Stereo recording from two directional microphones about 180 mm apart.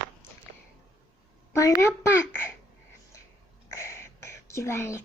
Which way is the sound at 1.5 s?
15° left (ahead or behind).